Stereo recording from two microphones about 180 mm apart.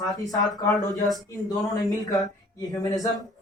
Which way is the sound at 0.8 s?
20° left (ahead or behind).